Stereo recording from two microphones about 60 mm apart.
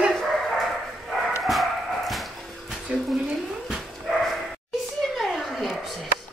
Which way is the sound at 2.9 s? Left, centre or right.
Centre.